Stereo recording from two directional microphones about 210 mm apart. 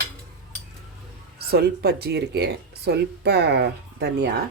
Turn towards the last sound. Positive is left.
turn(degrees=-50)  # may be behind; listen again after turning